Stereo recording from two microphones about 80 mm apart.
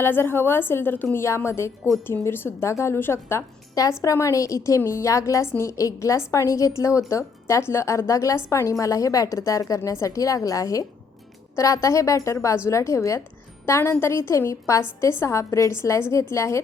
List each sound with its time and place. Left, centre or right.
0.0 s a woman's voice: left
4.0 s a woman's voice: left